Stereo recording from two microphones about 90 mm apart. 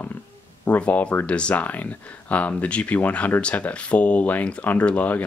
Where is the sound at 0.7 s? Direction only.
15° left (ahead or behind).